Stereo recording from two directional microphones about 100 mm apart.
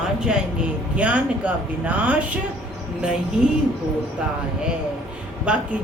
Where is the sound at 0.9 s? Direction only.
15° right (ahead or behind).